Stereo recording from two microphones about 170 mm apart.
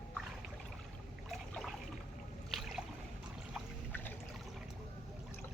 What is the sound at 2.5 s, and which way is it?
Boat, 5° right (ahead or behind).